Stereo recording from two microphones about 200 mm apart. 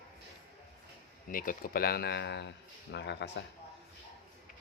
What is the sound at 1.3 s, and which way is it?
A man's voice, 45° left (ahead or behind).